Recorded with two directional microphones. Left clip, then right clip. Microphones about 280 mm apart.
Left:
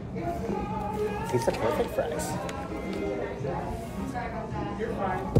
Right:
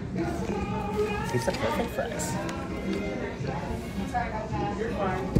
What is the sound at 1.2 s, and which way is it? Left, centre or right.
Speech, left.